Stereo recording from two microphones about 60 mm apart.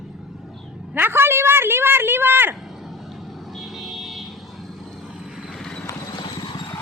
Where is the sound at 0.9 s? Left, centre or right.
Right.